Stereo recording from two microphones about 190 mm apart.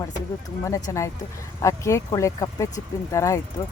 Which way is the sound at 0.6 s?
15° left (ahead or behind).